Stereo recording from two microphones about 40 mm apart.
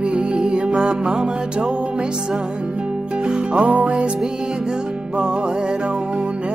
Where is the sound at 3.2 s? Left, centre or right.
Right.